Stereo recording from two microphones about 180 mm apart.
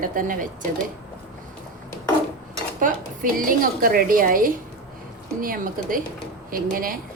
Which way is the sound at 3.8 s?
55° right (ahead or behind).